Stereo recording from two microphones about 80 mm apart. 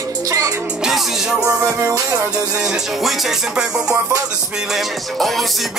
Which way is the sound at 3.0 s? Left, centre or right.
Centre.